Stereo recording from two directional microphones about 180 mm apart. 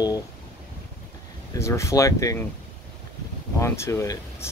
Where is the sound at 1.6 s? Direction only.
15° left (ahead or behind).